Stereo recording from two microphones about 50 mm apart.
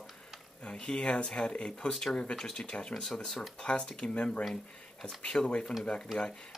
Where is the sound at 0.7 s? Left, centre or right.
Centre.